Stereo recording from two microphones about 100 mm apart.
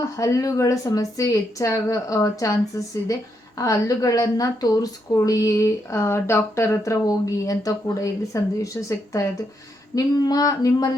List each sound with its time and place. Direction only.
0.0 s a woman's voice: 30° left (ahead or behind)